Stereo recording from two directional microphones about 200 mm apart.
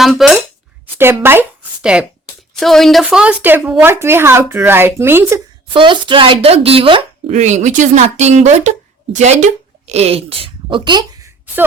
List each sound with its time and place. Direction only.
0.0 s speech: centre (ahead or behind)
0.9 s a woman's voice: 10° right (ahead or behind)
5.7 s speech: 25° right (ahead or behind)